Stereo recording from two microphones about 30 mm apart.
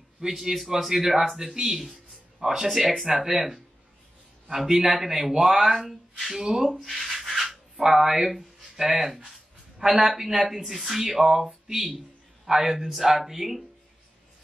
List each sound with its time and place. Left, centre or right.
0.3 s speech: centre
6.7 s speech: centre